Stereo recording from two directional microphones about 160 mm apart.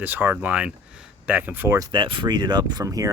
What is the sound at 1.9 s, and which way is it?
Speech, 30° right (ahead or behind).